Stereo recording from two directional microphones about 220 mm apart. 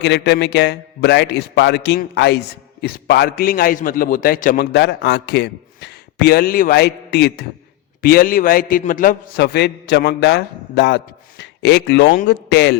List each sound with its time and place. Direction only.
0.0 s a man's voice: 50° left (ahead or behind)